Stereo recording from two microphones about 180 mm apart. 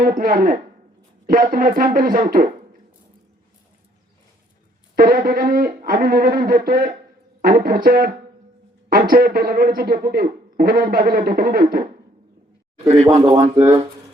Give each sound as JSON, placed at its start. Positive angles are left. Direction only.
{"t": 0.0, "sound": "speech", "side_deg": -50}
{"t": 4.9, "sound": "a man's voice", "side_deg": -55}
{"t": 13.1, "sound": "speech", "side_deg": -25}